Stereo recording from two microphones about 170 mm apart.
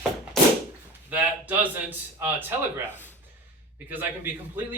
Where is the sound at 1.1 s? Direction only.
10° right (ahead or behind).